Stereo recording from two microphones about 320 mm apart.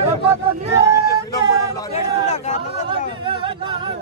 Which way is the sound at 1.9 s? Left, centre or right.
Left.